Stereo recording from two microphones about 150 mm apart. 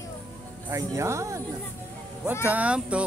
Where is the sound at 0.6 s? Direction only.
20° right (ahead or behind).